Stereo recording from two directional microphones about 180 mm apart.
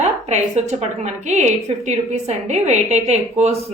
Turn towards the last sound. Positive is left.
turn(degrees=-40)  # may be behind; listen again after turning